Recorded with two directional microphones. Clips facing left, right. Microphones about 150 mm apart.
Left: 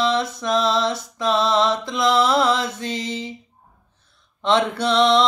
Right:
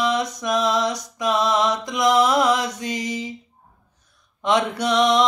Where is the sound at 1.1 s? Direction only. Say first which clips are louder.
Left 1 dB; 15° right (ahead or behind).